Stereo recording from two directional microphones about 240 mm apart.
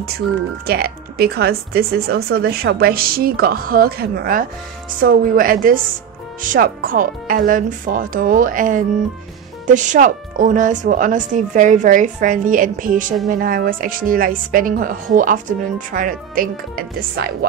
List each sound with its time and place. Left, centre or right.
0.7 s a woman's voice: right